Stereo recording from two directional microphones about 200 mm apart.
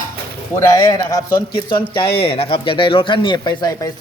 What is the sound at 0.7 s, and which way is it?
Speech, 15° left (ahead or behind).